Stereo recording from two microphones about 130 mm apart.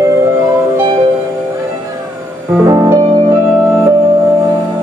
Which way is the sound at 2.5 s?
25° right (ahead or behind).